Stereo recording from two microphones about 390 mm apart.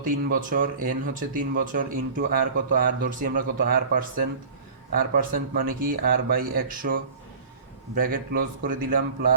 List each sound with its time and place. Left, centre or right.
0.0 s speech: right